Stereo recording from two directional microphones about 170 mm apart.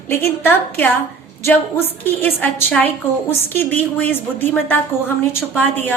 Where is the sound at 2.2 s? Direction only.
10° left (ahead or behind).